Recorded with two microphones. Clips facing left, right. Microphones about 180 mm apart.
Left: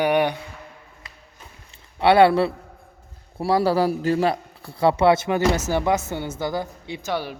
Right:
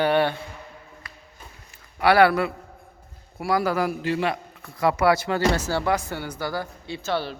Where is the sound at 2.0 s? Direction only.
25° left (ahead or behind).